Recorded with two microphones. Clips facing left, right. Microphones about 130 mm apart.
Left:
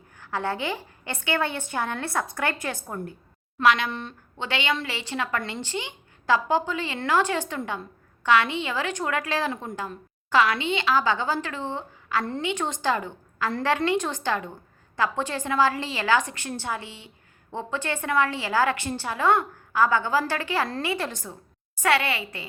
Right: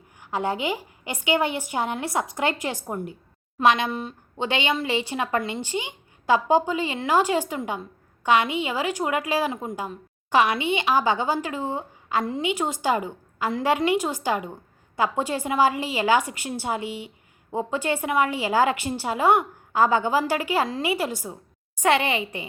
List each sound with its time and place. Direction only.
0.2 s a woman's voice: 15° right (ahead or behind)